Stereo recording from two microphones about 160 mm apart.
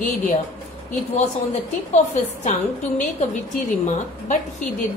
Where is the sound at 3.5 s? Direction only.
50° left (ahead or behind).